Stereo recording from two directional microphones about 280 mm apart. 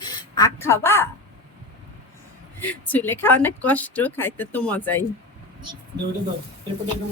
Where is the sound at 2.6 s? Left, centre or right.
Centre.